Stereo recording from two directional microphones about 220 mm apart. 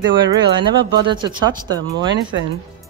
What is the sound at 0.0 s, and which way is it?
Speech, 20° right (ahead or behind).